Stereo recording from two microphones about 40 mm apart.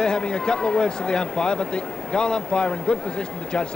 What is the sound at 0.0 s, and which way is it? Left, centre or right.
Speech, left.